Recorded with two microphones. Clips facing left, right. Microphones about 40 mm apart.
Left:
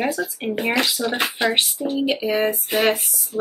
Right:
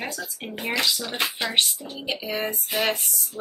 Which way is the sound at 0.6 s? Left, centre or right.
Centre.